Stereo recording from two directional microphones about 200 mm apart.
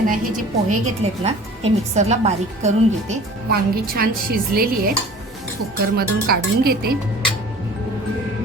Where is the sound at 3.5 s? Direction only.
50° right (ahead or behind).